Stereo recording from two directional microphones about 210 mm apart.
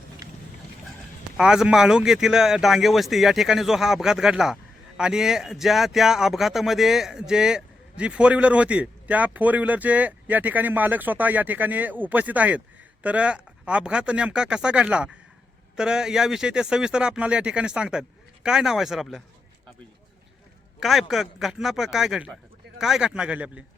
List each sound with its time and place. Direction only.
1.4 s speech: 5° right (ahead or behind)
20.7 s speech: centre (ahead or behind)